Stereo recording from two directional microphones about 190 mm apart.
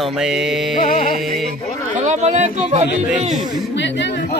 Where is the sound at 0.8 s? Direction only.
45° left (ahead or behind).